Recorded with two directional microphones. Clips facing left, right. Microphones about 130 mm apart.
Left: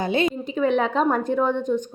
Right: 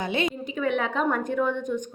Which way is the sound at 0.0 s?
35° left (ahead or behind).